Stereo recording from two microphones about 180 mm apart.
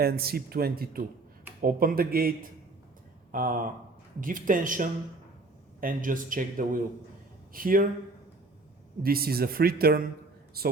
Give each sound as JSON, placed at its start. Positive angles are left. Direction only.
{"t": 0.0, "sound": "a man's voice", "side_deg": -60}
{"t": 9.0, "sound": "speech", "side_deg": -55}